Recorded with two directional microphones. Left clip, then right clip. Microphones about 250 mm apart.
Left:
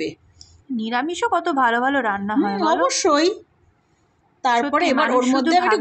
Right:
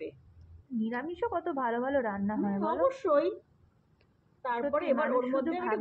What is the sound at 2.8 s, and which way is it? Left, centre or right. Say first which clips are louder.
Speech: left 6 dB; left.